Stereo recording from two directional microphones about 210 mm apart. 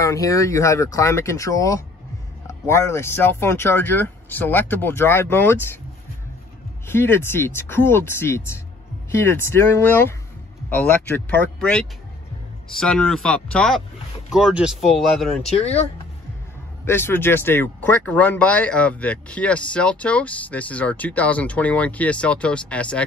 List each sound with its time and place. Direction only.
0.0 s speech: 15° left (ahead or behind)
6.9 s speech: 10° left (ahead or behind)
15.5 s speech: 30° left (ahead or behind)
16.8 s speech: 10° left (ahead or behind)